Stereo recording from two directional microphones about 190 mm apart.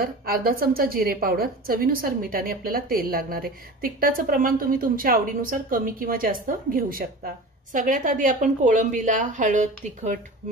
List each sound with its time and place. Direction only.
0.0 s a woman's voice: 50° right (ahead or behind)